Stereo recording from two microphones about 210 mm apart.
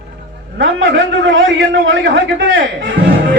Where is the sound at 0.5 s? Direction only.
55° right (ahead or behind).